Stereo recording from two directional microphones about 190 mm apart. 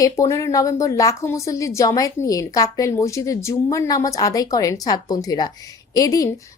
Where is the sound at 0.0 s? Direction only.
15° left (ahead or behind).